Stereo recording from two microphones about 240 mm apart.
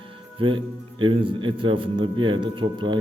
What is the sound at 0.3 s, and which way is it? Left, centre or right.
A man's voice, right.